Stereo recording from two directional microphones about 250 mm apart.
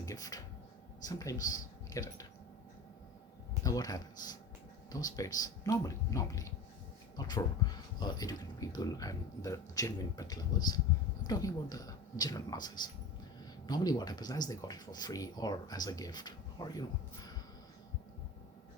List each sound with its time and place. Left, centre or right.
0.0 s speech: centre
3.6 s speech: centre